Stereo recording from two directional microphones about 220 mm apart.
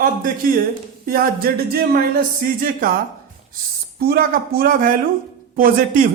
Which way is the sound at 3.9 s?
45° right (ahead or behind).